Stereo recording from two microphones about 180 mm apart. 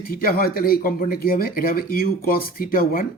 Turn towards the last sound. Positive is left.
turn(degrees=55)  # may be behind; listen again after turning